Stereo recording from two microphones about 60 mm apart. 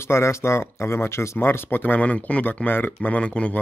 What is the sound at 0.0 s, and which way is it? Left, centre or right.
Speech, left.